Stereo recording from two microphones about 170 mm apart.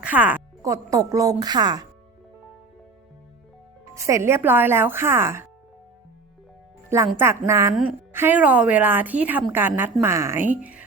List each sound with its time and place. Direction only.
0.0 s speech: 10° right (ahead or behind)
3.9 s speech: 20° right (ahead or behind)
6.9 s speech: 15° right (ahead or behind)